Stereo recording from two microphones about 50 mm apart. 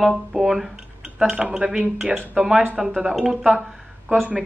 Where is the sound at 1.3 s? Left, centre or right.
Right.